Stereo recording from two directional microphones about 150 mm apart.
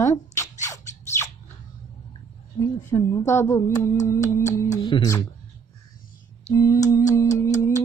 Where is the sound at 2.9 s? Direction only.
20° left (ahead or behind).